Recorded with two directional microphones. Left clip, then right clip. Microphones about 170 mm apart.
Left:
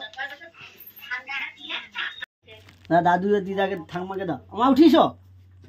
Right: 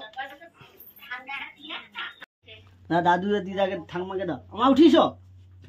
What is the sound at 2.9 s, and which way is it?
A man's voice, 50° left (ahead or behind).